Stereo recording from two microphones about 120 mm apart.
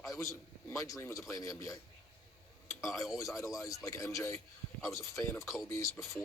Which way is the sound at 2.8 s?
Centre (ahead or behind).